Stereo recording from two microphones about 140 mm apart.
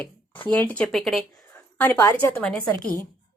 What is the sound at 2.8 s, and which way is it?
Speech, 25° right (ahead or behind).